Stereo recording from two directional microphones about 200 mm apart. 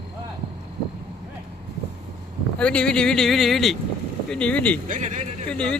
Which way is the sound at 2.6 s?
5° left (ahead or behind).